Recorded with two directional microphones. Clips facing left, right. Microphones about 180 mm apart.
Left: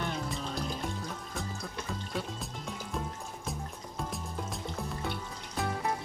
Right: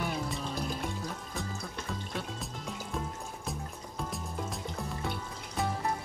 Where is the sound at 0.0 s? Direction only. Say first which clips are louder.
Right 1 dB; 5° right (ahead or behind).